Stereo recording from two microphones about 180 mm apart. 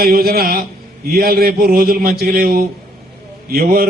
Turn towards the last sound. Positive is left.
turn(degrees=-55)  # may be behind; listen again after turning